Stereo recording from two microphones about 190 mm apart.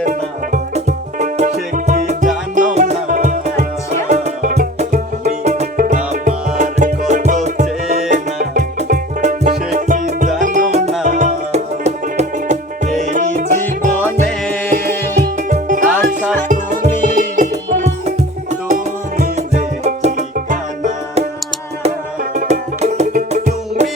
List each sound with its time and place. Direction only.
0.0 s music: 40° right (ahead or behind)
13.9 s music: 5° left (ahead or behind)
15.4 s music: 40° right (ahead or behind)
19.2 s music: 35° right (ahead or behind)